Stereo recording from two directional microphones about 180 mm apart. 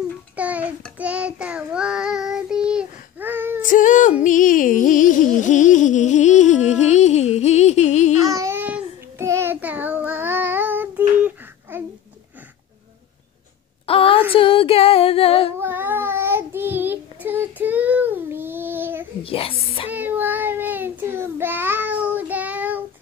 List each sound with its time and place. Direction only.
0.4 s a sound: 10° right (ahead or behind)
0.9 s child singing: 5° right (ahead or behind)
3.6 s music: 45° left (ahead or behind)
8.2 s child singing: 20° right (ahead or behind)
13.8 s a sound: 30° left (ahead or behind)
14.3 s female singing: 30° left (ahead or behind)
15.6 s child singing: 10° right (ahead or behind)
19.2 s a sound: 30° left (ahead or behind)
19.9 s child singing: 10° right (ahead or behind)